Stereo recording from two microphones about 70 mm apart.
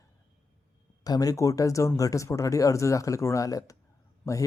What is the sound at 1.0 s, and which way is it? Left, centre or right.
Speech, left.